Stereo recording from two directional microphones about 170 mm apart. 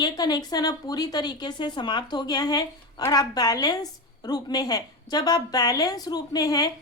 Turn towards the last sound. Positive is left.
turn(degrees=20)  # may be behind; listen again after turning